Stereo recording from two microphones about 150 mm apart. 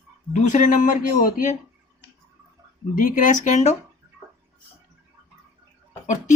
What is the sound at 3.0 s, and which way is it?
Speech, 65° left (ahead or behind).